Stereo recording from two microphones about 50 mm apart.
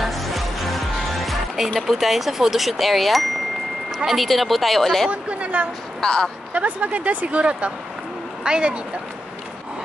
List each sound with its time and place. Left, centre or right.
0.0 s music: centre
1.8 s speech: centre
5.1 s speech: right
5.9 s speech: centre
6.5 s speech: right